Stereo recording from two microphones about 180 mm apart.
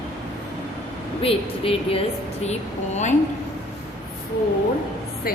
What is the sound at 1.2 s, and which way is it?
A woman's voice, 30° left (ahead or behind).